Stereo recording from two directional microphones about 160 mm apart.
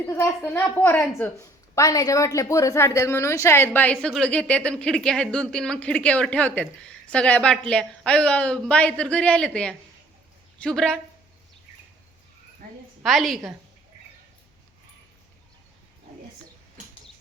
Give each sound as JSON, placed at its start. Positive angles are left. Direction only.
{"t": 0.1, "sound": "a woman's voice", "side_deg": 15}
{"t": 13.0, "sound": "a woman's voice", "side_deg": 0}